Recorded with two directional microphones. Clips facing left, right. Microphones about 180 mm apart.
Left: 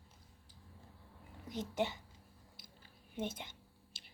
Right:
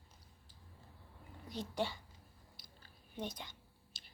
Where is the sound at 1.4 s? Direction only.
20° left (ahead or behind).